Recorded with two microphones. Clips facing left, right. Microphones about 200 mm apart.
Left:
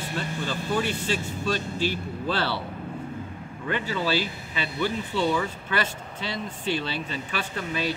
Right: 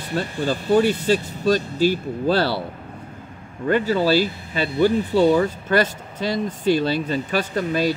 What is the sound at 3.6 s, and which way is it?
Speech, 40° right (ahead or behind).